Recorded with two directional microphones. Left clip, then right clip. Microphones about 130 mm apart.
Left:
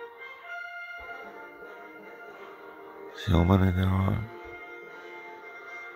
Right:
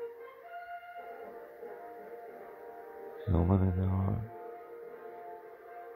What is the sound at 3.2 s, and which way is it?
Speech, 25° left (ahead or behind).